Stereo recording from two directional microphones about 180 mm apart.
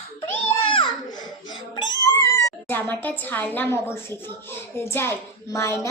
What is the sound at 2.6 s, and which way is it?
A child's voice, 10° left (ahead or behind).